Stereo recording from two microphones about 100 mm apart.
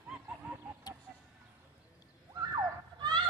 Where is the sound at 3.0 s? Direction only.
45° right (ahead or behind).